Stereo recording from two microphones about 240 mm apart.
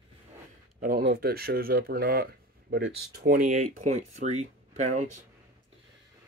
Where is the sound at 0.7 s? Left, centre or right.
Right.